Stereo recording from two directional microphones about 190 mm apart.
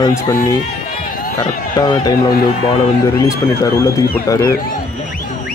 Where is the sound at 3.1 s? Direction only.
15° left (ahead or behind).